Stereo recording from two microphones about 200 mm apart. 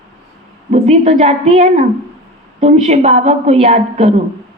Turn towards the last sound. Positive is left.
turn(degrees=-35)  # may be behind; listen again after turning